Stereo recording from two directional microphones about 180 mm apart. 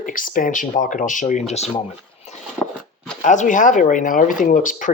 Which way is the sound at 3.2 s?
45° left (ahead or behind).